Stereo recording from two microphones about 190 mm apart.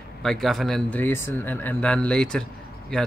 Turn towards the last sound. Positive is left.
turn(degrees=5)  # may be behind; listen again after turning